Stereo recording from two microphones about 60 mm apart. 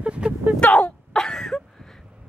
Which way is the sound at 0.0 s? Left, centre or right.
Centre.